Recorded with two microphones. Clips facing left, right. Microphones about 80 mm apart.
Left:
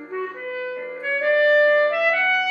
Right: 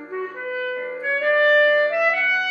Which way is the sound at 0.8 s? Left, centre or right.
Centre.